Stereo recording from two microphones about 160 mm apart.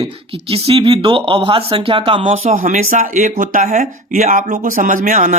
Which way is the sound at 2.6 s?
55° right (ahead or behind).